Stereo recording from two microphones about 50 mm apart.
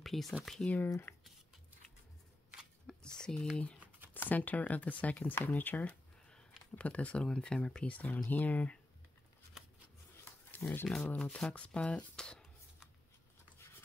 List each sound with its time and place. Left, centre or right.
0.0 s a sound: centre
0.4 s speech: centre
0.7 s speech: left
2.9 s a sound: centre
4.3 s speech: left
7.2 s speech: centre
7.9 s speech: left
10.6 s speech: left
11.1 s speech: left
12.2 s a sound: centre